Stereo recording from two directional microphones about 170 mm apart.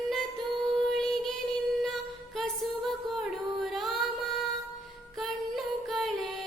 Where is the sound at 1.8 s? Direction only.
Centre (ahead or behind).